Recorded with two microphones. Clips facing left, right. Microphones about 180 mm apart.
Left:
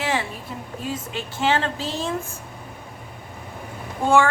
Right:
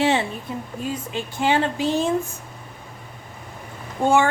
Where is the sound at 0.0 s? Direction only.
25° right (ahead or behind).